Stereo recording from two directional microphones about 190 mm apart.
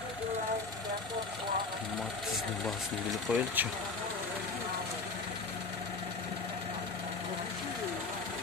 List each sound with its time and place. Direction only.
3.1 s speech: 5° right (ahead or behind)